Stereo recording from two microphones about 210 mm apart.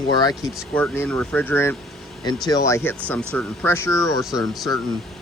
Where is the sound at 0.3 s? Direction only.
10° left (ahead or behind).